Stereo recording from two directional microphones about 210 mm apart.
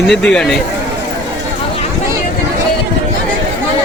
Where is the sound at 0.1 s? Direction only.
5° left (ahead or behind).